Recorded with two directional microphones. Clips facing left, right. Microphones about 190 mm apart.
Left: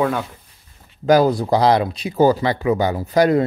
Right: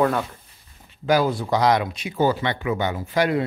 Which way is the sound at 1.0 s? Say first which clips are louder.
Left 6 dB; 40° left (ahead or behind).